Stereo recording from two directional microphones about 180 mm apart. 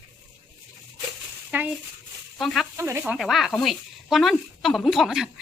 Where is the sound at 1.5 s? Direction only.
10° right (ahead or behind).